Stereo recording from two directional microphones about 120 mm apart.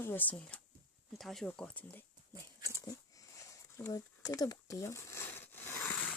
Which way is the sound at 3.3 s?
25° left (ahead or behind).